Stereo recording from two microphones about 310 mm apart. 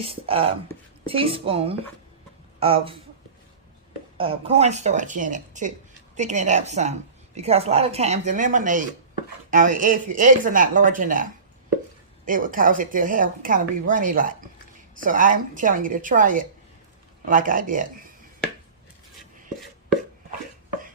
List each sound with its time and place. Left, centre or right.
0.0 s speech: centre
4.2 s a woman's voice: centre